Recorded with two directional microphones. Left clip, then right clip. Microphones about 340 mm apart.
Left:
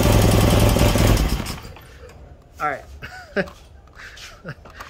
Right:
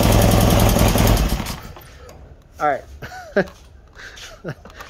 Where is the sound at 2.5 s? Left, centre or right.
Centre.